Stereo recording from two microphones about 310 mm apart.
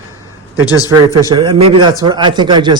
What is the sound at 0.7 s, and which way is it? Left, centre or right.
Speech, centre.